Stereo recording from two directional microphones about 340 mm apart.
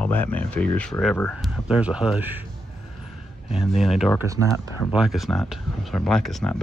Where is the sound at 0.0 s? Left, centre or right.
Centre.